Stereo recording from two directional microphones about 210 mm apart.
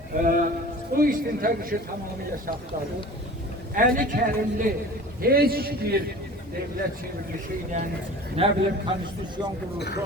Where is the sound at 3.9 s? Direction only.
40° right (ahead or behind).